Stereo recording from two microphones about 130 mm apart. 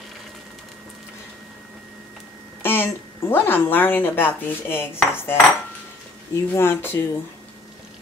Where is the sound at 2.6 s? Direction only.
15° left (ahead or behind).